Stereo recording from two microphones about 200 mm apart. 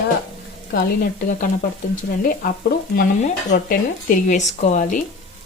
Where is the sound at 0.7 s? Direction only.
45° left (ahead or behind).